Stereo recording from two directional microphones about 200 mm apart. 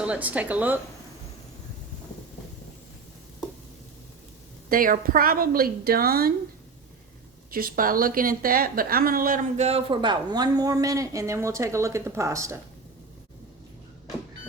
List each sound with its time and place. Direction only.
0.0 s speech: 5° right (ahead or behind)
4.7 s a woman's voice: 45° right (ahead or behind)
7.5 s a woman's voice: 45° right (ahead or behind); by 12.5 s 15° right (ahead or behind)